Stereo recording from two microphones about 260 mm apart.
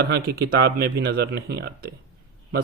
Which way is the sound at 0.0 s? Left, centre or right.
Right.